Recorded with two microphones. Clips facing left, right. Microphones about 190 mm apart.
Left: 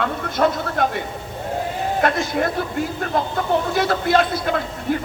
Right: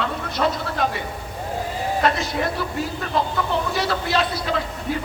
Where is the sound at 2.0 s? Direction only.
50° left (ahead or behind).